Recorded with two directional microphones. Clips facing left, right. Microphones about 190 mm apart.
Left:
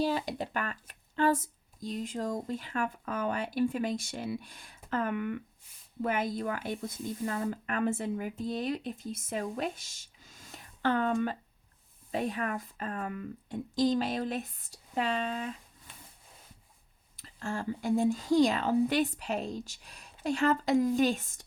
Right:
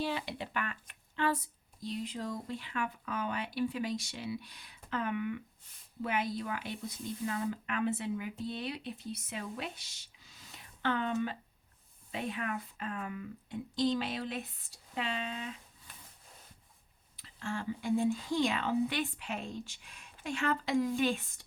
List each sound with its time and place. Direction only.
0.0 s speech: 40° left (ahead or behind)
17.2 s speech: 45° left (ahead or behind)